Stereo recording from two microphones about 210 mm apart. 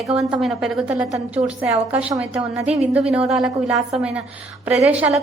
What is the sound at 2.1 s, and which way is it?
A woman's voice, 5° right (ahead or behind).